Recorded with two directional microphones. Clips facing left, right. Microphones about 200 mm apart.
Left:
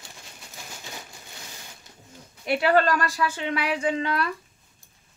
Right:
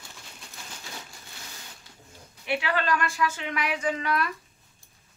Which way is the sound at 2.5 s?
45° left (ahead or behind).